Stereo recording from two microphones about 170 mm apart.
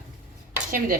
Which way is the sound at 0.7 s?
55° right (ahead or behind).